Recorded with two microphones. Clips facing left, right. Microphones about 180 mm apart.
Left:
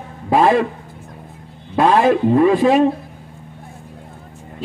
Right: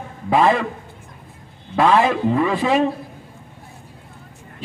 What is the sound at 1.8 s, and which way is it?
A man's voice, 45° left (ahead or behind).